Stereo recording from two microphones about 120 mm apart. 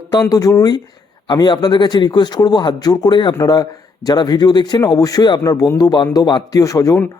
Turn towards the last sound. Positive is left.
turn(degrees=30)  # may be behind; listen again after turning